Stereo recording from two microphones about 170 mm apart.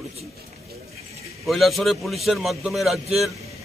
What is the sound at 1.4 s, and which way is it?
A man's voice, centre (ahead or behind).